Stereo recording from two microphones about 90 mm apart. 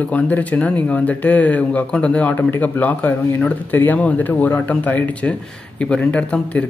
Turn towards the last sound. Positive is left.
turn(degrees=15)  # may be behind; listen again after turning